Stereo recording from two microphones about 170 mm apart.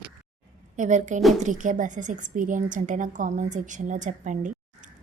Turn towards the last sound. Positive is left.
turn(degrees=-45)  # may be behind; listen again after turning